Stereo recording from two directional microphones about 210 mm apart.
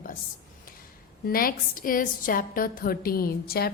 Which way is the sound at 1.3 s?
45° left (ahead or behind).